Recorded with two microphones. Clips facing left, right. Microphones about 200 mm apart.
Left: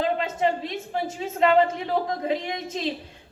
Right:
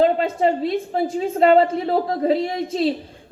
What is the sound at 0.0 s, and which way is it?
A woman's voice, 35° right (ahead or behind).